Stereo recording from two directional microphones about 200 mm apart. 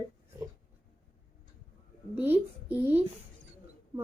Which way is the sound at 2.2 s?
10° right (ahead or behind).